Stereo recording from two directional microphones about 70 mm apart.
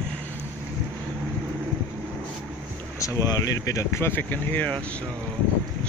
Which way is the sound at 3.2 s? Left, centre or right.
Left.